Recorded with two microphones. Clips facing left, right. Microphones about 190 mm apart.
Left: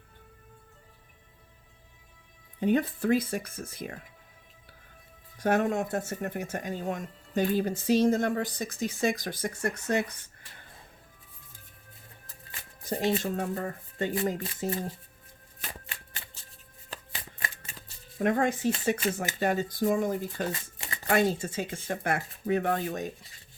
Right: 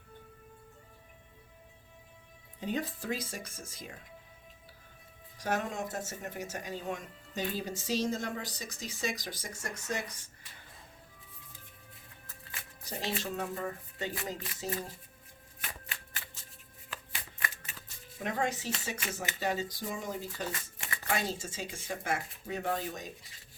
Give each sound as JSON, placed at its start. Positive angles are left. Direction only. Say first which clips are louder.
{"t": 2.6, "sound": "speech", "louder": "left 9 dB", "side_deg": 60}
{"t": 5.4, "sound": "speech", "louder": "left 8 dB", "side_deg": 55}
{"t": 12.8, "sound": "speech", "louder": "left 9 dB", "side_deg": 50}
{"t": 16.1, "sound": "shuffling cards", "louder": "left 1 dB", "side_deg": 25}
{"t": 16.9, "sound": "shuffling cards", "louder": "left 3 dB", "side_deg": 40}
{"t": 17.4, "sound": "shuffling cards", "louder": "right 1 dB", "side_deg": 25}
{"t": 18.2, "sound": "speech", "louder": "left 8 dB", "side_deg": 55}
{"t": 20.5, "sound": "shuffling cards", "louder": "left 4 dB", "side_deg": 25}
{"t": 21.1, "sound": "speech", "louder": "left 9 dB", "side_deg": 55}